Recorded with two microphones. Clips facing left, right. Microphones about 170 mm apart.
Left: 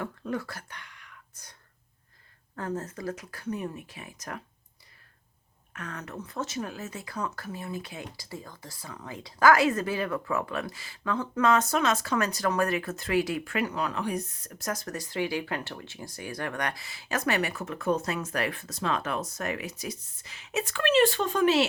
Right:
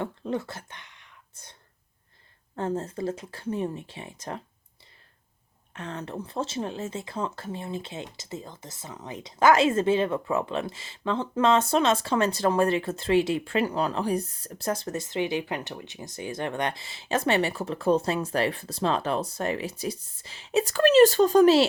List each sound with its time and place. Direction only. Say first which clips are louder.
0.0 s speech: right 3 dB; 25° right (ahead or behind)
2.6 s speech: right 5 dB; 25° right (ahead or behind)
5.7 s speech: right 4 dB; 25° right (ahead or behind)